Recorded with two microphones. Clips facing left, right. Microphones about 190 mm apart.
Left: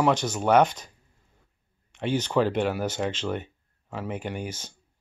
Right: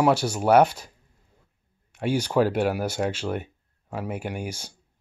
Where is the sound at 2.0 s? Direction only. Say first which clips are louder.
Right 2 dB; 10° right (ahead or behind).